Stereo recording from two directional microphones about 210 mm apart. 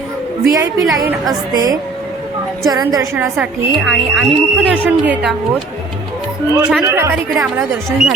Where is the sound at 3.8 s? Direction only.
Centre (ahead or behind).